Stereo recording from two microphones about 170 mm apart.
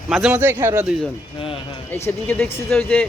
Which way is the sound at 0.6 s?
15° right (ahead or behind).